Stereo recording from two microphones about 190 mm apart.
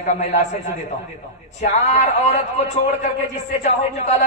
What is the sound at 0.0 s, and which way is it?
A man's voice, 35° left (ahead or behind).